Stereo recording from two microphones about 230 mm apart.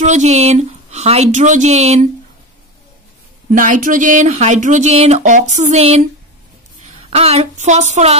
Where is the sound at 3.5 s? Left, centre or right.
Right.